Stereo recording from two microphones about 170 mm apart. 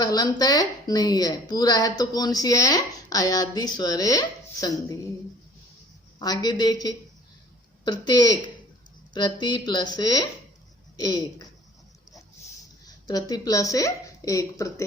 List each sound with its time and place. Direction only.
0.0 s speech: 20° left (ahead or behind)
6.1 s speech: 25° left (ahead or behind)
12.8 s a woman's voice: 25° left (ahead or behind)